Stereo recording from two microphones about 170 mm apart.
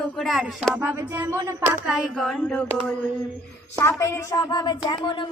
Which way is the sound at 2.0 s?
Centre (ahead or behind).